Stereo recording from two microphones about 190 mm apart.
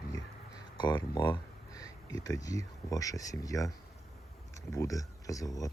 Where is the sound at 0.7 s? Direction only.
25° left (ahead or behind).